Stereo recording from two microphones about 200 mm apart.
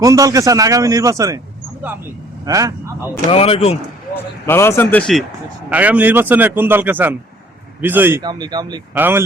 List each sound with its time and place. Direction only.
0.0 s a man's voice: 15° right (ahead or behind)
2.4 s speech: 15° right (ahead or behind)
3.2 s speech: 30° left (ahead or behind)
4.4 s speech: 10° left (ahead or behind)
5.6 s a man's voice: 10° right (ahead or behind)
9.0 s a man's voice: 10° right (ahead or behind)